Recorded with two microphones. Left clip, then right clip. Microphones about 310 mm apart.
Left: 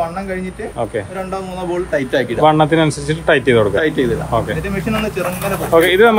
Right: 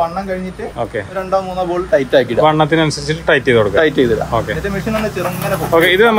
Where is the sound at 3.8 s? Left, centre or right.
Right.